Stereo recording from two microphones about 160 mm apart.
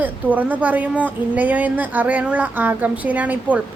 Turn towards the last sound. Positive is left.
turn(degrees=-10)  # may be behind; listen again after turning